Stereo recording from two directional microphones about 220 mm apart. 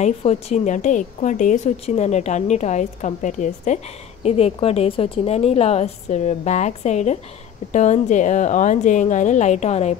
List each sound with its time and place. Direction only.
0.0 s a woman's voice: 30° left (ahead or behind)